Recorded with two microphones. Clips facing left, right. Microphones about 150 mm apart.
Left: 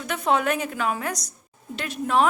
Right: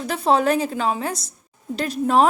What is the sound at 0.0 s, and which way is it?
A woman's voice, 35° right (ahead or behind).